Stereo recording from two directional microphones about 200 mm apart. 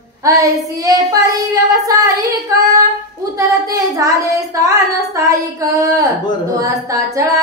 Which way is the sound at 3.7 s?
15° right (ahead or behind).